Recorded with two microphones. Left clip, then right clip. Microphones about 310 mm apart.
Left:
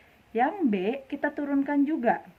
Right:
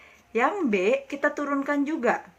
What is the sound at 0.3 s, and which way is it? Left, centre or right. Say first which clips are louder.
Speech: right 2 dB; left.